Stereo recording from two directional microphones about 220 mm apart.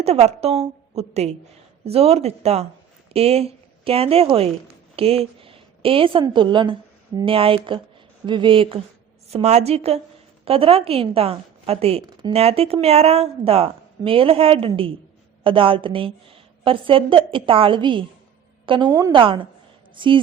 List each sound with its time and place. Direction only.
0.0 s a woman's voice: 30° right (ahead or behind)